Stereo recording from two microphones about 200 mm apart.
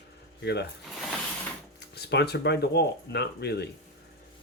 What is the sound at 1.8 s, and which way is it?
Speech, 55° left (ahead or behind).